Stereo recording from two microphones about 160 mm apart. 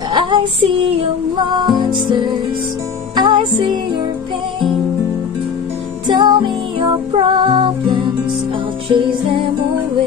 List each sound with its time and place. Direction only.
0.1 s child singing: 30° right (ahead or behind)
1.5 s music: 30° right (ahead or behind)
6.0 s music: 25° right (ahead or behind)